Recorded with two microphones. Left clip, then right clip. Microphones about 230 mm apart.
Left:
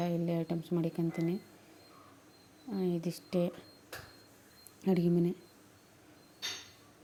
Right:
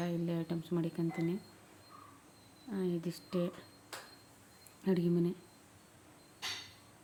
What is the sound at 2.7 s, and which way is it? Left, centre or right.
Speech, centre.